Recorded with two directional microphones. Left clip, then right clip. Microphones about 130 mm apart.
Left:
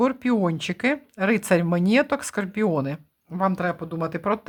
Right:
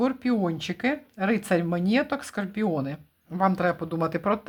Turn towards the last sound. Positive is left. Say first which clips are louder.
# even
turn(degrees=10)  # may be behind; listen again after turning